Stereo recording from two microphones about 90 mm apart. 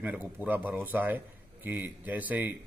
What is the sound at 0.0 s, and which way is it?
A man's voice, 20° right (ahead or behind).